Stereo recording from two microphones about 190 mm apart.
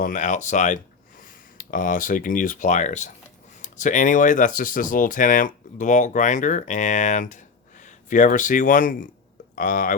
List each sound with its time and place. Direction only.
0.0 s speech: 40° left (ahead or behind)